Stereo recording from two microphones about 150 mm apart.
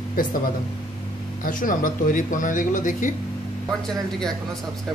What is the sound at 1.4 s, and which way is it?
Speech, 65° left (ahead or behind).